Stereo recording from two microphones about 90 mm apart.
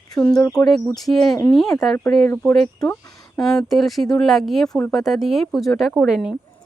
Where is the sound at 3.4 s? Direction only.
5° left (ahead or behind).